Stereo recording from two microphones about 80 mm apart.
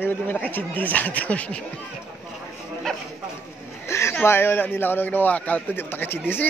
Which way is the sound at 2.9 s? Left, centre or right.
Centre.